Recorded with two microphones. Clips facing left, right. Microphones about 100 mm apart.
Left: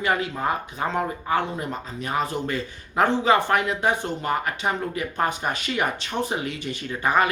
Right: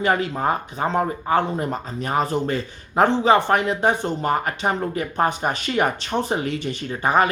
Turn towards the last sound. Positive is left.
turn(degrees=-30)  # may be behind; listen again after turning